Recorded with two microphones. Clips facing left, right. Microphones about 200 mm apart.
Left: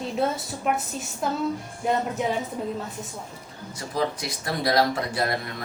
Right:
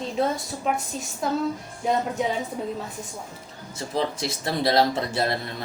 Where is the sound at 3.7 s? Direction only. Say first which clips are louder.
Right 1 dB; 25° right (ahead or behind).